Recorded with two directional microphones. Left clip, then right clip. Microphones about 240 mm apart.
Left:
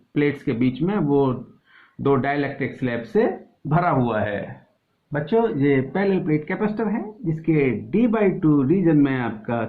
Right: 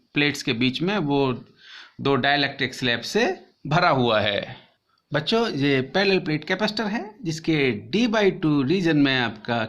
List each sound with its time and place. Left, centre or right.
0.1 s speech: right